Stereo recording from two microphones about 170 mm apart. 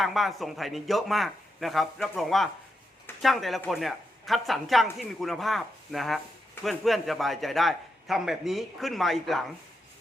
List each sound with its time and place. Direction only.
0.0 s a man's voice: centre (ahead or behind)